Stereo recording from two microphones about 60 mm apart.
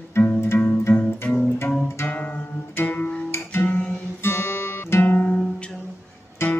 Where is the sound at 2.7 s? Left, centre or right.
Left.